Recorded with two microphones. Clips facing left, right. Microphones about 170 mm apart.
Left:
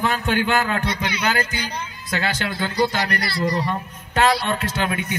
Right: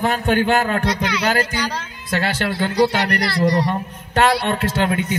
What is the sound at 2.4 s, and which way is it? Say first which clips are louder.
Speech: right 6 dB; 65° right (ahead or behind).